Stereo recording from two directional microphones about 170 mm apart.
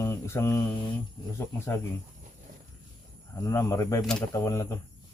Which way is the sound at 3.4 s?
20° left (ahead or behind).